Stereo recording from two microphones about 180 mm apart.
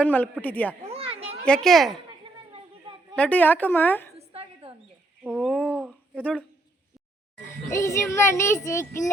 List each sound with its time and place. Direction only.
0.0 s a child's voice: 10° left (ahead or behind)
0.8 s a child's voice: 35° right (ahead or behind)
1.5 s speech: 5° left (ahead or behind)
2.5 s a sound: 25° right (ahead or behind)
3.2 s a child's voice: 10° left (ahead or behind)
4.3 s a sound: 35° right (ahead or behind)
5.2 s speech: 5° right (ahead or behind)
6.1 s a child's voice: 5° left (ahead or behind)
7.7 s a child's voice: 15° left (ahead or behind)